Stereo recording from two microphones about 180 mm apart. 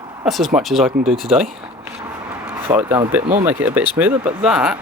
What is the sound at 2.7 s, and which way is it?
Speech, 15° right (ahead or behind).